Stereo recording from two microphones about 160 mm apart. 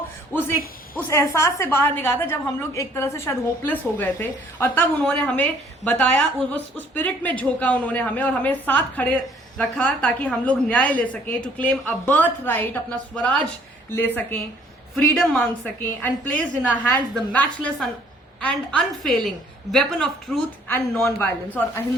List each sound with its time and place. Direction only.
0.9 s a woman's voice: 15° left (ahead or behind)